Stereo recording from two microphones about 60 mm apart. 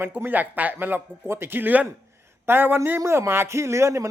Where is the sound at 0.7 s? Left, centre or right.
Right.